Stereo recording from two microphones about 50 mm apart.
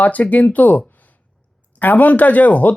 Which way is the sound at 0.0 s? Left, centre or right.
Left.